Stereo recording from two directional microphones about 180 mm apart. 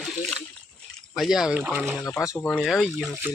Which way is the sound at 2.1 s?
15° left (ahead or behind).